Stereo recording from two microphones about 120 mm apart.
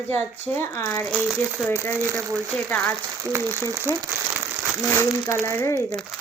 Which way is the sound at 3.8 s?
20° right (ahead or behind).